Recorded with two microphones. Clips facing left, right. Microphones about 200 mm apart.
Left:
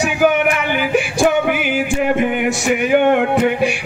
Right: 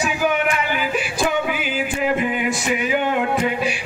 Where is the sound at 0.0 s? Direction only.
70° left (ahead or behind).